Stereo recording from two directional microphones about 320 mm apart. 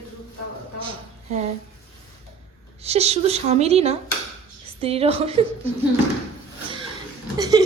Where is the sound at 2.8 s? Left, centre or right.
Centre.